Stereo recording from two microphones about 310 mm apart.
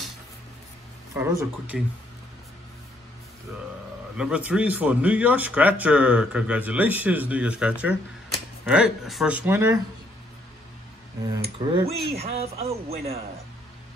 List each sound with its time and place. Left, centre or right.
1.1 s speech: centre
4.2 s speech: centre
11.6 s speech: centre